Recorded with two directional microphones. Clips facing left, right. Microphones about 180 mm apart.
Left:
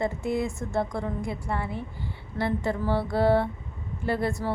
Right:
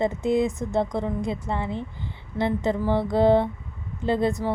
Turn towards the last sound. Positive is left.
turn(degrees=-20)  # may be behind; listen again after turning